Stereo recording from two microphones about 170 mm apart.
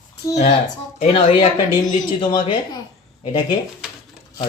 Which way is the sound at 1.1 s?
35° left (ahead or behind).